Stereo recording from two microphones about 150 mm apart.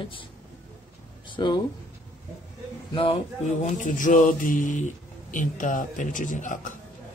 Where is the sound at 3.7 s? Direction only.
60° left (ahead or behind).